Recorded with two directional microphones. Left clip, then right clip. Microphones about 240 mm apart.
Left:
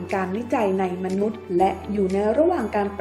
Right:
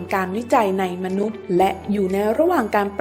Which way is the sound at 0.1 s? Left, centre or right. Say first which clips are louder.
Right 5 dB; right.